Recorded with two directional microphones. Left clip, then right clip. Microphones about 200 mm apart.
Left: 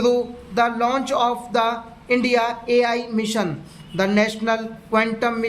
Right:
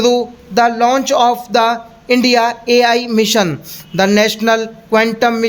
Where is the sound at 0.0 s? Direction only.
40° right (ahead or behind).